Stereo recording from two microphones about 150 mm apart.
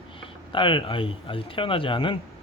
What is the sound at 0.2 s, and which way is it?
Speech, 35° left (ahead or behind).